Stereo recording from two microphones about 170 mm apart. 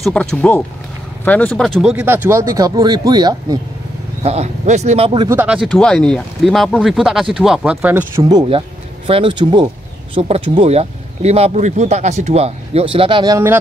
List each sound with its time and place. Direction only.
0.0 s speech: 5° left (ahead or behind); by 3.5 s 25° right (ahead or behind)
4.2 s speech: 40° right (ahead or behind)
5.3 s speech: 10° right (ahead or behind)
8.2 s speech: 25° right (ahead or behind)